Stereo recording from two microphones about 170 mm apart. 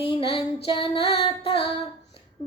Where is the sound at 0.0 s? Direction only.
30° left (ahead or behind).